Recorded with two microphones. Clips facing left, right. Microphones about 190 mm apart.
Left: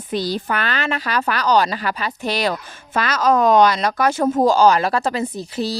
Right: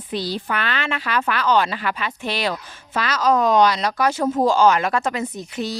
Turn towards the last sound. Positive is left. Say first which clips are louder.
# left 3 dB
turn(degrees=35)  # may be behind; listen again after turning